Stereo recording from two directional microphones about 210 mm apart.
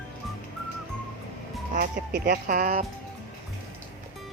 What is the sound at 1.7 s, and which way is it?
Speech, 40° right (ahead or behind).